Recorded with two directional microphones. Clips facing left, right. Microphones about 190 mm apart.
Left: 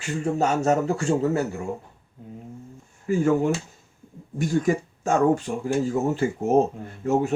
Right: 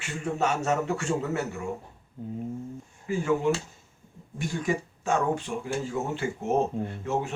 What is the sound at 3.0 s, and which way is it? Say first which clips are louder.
Speech: left 4 dB; 45° left (ahead or behind).